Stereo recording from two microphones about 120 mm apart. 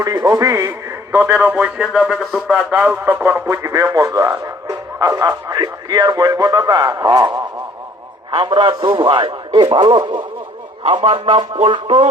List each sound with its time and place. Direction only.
0.0 s speech: 30° right (ahead or behind)
0.7 s a man's voice: 15° right (ahead or behind)
1.9 s speech: centre (ahead or behind)
2.7 s a man's voice: 15° right (ahead or behind); by 12.0 s 45° right (ahead or behind)